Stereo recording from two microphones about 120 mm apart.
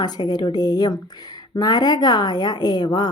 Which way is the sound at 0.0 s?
35° left (ahead or behind).